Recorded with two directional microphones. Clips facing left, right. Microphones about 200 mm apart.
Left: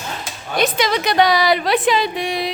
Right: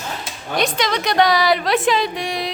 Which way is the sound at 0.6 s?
5° left (ahead or behind).